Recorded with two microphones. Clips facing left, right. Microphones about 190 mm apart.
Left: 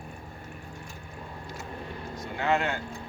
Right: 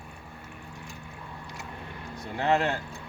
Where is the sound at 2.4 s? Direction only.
35° right (ahead or behind).